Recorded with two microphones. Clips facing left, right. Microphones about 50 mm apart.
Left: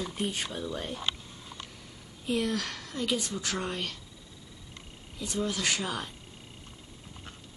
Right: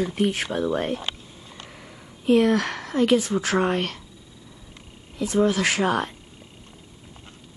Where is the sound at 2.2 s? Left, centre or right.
Right.